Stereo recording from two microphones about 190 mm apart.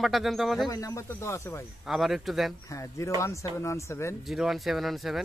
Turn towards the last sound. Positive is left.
turn(degrees=0)  # may be behind; listen again after turning